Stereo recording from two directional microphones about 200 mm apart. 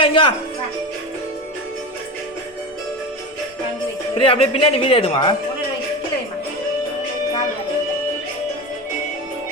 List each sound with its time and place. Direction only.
0.0 s music: 25° left (ahead or behind)
4.2 s speech: 30° left (ahead or behind)